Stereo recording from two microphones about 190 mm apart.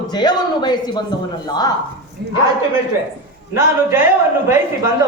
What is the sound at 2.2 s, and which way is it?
Speech, 60° right (ahead or behind).